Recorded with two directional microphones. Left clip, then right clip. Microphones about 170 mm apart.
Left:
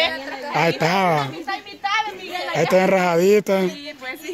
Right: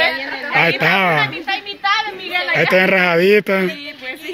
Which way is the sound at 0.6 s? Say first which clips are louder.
Right 5 dB; 25° left (ahead or behind).